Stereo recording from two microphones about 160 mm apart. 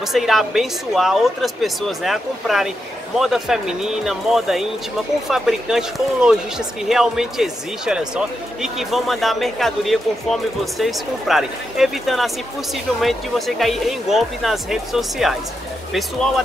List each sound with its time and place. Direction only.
0.1 s speech: centre (ahead or behind)